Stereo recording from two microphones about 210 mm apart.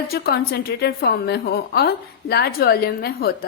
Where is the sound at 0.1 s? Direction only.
45° left (ahead or behind).